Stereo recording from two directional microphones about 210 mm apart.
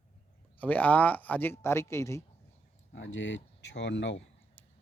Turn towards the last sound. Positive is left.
turn(degrees=60)  # may be behind; listen again after turning